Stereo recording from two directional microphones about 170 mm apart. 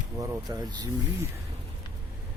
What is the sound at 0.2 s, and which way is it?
Speech, 20° right (ahead or behind).